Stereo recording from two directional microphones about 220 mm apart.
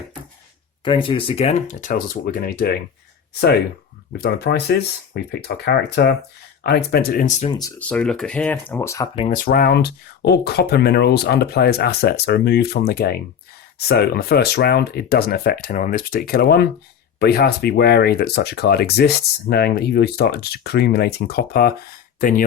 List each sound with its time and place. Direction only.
0.9 s speech: 20° left (ahead or behind); by 2.7 s 45° left (ahead or behind)
4.2 s speech: 45° left (ahead or behind)
7.5 s speech: 15° left (ahead or behind)
9.1 s speech: 25° left (ahead or behind)
9.4 s speech: 40° left (ahead or behind)